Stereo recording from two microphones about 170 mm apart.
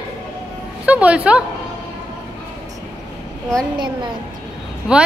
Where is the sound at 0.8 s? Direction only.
5° right (ahead or behind).